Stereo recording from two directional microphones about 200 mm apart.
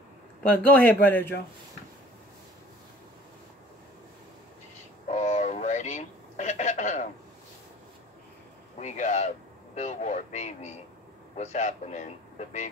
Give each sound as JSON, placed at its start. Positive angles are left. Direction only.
{"t": 0.5, "sound": "speech", "side_deg": 5}
{"t": 5.0, "sound": "radio", "side_deg": 35}
{"t": 8.7, "sound": "a sound", "side_deg": 35}